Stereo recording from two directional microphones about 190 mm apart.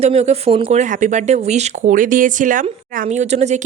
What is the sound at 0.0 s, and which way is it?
Speech, 35° right (ahead or behind).